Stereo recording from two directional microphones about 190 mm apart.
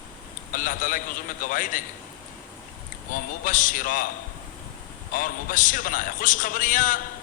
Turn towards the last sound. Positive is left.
turn(degrees=45)  # may be behind; listen again after turning